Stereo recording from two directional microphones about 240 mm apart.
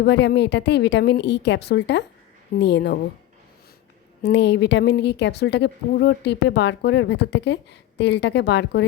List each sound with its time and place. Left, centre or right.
0.0 s a woman's voice: left
4.2 s a woman's voice: left